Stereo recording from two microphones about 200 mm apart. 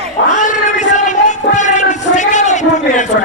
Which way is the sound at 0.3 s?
40° left (ahead or behind).